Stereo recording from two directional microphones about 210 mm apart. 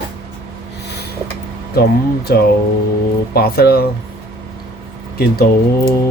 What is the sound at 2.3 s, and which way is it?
Speech, 50° left (ahead or behind).